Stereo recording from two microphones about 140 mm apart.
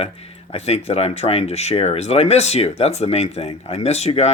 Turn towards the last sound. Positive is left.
turn(degrees=50)  # may be behind; listen again after turning